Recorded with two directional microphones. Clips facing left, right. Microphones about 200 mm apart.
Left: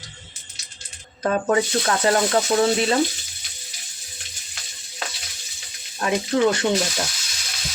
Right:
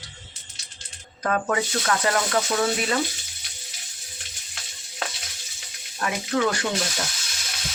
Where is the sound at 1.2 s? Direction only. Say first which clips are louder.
Left 4 dB; 30° left (ahead or behind).